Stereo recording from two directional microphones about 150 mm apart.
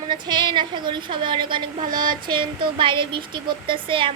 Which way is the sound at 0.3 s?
30° right (ahead or behind).